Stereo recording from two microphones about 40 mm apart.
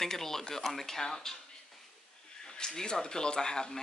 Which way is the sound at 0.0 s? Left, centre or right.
Centre.